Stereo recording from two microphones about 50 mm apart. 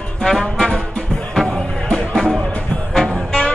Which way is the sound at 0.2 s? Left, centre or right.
Centre.